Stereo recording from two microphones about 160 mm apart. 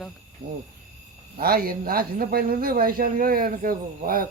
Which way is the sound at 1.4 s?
65° right (ahead or behind).